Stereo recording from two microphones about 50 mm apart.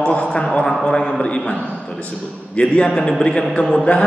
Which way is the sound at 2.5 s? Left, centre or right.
Centre.